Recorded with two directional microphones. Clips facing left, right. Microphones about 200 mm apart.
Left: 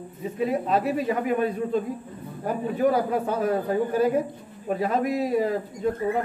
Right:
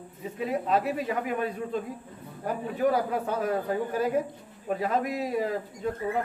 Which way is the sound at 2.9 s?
30° left (ahead or behind).